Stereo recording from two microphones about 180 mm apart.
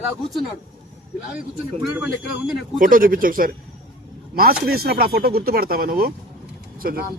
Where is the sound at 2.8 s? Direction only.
50° right (ahead or behind).